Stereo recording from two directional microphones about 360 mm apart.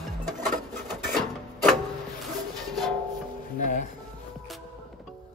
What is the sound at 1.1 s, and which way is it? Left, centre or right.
Printer, centre.